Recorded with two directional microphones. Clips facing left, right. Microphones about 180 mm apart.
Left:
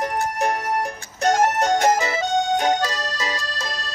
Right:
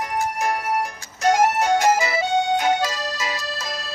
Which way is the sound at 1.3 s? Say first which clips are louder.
Right 1 dB; 10° right (ahead or behind).